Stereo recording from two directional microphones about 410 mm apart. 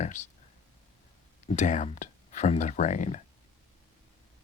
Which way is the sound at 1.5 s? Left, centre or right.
Centre.